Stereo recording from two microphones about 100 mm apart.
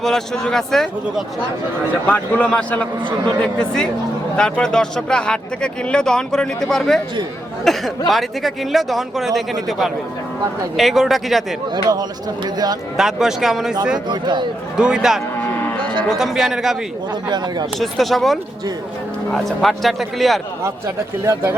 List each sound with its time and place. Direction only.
0.0 s speech: 5° left (ahead or behind)
2.0 s speech: 15° left (ahead or behind)
8.1 s speech: centre (ahead or behind)
11.7 s speech: 40° right (ahead or behind)
13.0 s speech: 5° right (ahead or behind)
14.1 s speech: 50° right (ahead or behind)
14.8 s a man's voice: 10° right (ahead or behind)
15.8 s cattle: 55° right (ahead or behind)
16.0 s speech: 5° right (ahead or behind)
17.2 s speech: 45° right (ahead or behind)
17.7 s speech: centre (ahead or behind)
20.7 s a man's voice: 30° right (ahead or behind)